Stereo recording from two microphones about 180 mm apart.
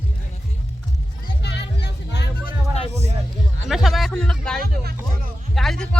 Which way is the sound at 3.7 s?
Centre (ahead or behind).